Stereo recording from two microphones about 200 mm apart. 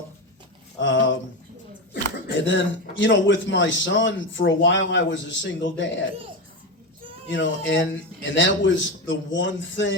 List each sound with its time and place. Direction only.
0.8 s a sound: 70° left (ahead or behind)
1.9 s speech: 65° left (ahead or behind)
7.3 s a man's voice: 65° left (ahead or behind)